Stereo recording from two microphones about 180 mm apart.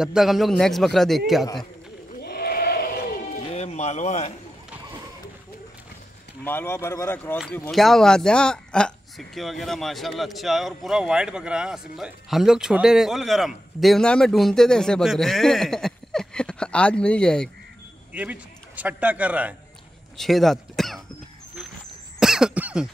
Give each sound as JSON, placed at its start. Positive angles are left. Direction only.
{"t": 0.0, "sound": "speech", "side_deg": 0}
{"t": 2.2, "sound": "bleat", "side_deg": 60}
{"t": 3.5, "sound": "music", "side_deg": 40}
{"t": 6.4, "sound": "speech", "side_deg": 10}
{"t": 18.1, "sound": "a man's voice", "side_deg": -10}
{"t": 22.2, "sound": "cough", "side_deg": -5}